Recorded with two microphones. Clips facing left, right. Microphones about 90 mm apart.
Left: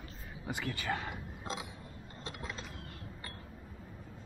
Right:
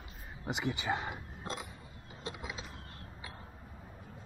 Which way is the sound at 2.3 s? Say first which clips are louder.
Right 1 dB; 5° right (ahead or behind).